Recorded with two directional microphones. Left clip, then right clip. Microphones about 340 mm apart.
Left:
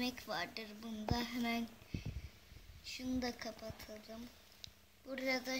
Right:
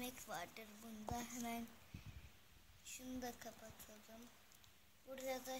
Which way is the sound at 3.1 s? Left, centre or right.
Centre.